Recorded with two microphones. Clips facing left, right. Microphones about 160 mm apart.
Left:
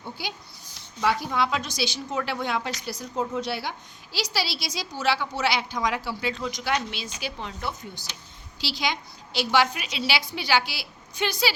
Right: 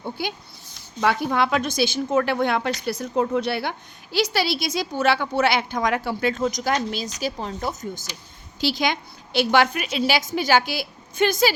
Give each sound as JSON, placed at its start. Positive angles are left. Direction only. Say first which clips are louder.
{"t": 0.2, "sound": "a woman's voice", "louder": "right 6 dB", "side_deg": -55}